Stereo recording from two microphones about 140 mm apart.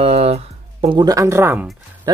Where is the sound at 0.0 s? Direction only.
45° right (ahead or behind).